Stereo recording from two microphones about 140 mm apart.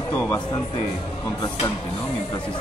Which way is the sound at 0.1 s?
10° left (ahead or behind).